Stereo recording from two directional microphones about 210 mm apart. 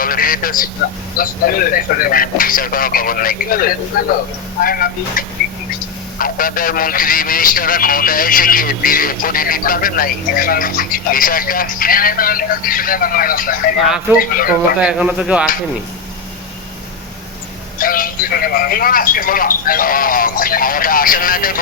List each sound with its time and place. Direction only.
0.0 s a man's voice: 45° left (ahead or behind)
13.8 s a man's voice: 5° right (ahead or behind)
14.2 s a man's voice: 45° left (ahead or behind)
14.8 s a man's voice: 5° right (ahead or behind)
17.7 s a man's voice: 40° left (ahead or behind)